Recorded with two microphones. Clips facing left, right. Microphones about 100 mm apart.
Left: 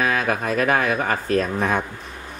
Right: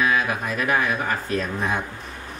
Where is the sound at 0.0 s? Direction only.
50° left (ahead or behind).